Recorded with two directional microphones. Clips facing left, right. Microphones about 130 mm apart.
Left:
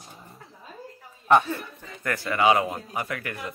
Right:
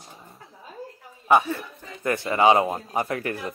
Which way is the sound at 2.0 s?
25° right (ahead or behind).